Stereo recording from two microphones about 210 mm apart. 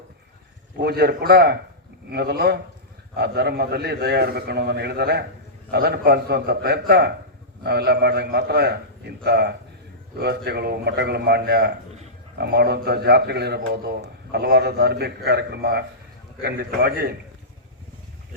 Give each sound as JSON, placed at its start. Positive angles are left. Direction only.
{"t": 0.8, "sound": "a man's voice", "side_deg": -50}